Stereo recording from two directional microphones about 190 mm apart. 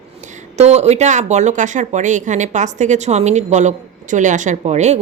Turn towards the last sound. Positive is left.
turn(degrees=-35)  # may be behind; listen again after turning